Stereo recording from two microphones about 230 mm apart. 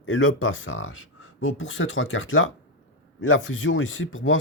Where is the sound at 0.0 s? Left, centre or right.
Left.